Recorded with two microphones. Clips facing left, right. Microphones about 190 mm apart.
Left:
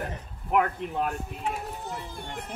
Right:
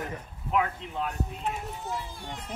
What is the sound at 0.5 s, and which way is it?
Speech, 60° left (ahead or behind).